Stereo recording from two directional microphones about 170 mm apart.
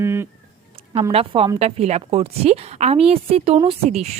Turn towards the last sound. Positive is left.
turn(degrees=-40)  # may be behind; listen again after turning